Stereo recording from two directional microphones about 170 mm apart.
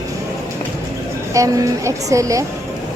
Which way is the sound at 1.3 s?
20° right (ahead or behind).